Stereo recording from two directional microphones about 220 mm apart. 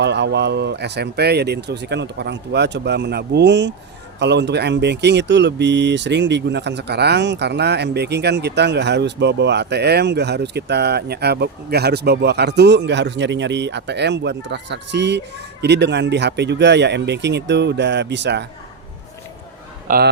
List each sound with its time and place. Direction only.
0.0 s speech: 50° right (ahead or behind)
19.9 s speech: 35° right (ahead or behind)